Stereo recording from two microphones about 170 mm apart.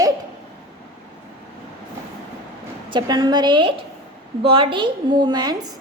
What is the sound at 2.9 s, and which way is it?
A woman's voice, 25° right (ahead or behind).